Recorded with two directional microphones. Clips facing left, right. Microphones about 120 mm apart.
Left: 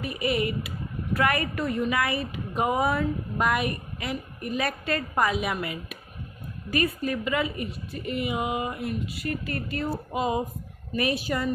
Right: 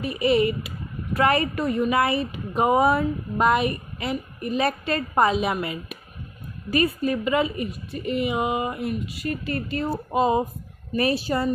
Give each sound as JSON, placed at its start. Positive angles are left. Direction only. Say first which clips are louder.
{"t": 0.0, "sound": "speech", "louder": "right 6 dB", "side_deg": -25}